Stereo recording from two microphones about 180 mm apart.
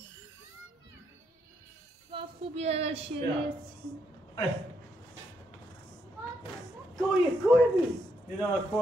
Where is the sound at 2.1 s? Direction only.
30° right (ahead or behind).